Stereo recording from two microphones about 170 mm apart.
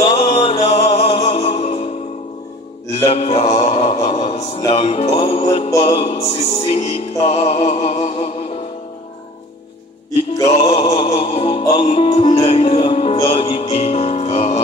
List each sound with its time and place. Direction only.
0.1 s music: 35° left (ahead or behind)
3.1 s a sound: 35° left (ahead or behind)
4.6 s music: 35° left (ahead or behind)
10.4 s music: 35° left (ahead or behind)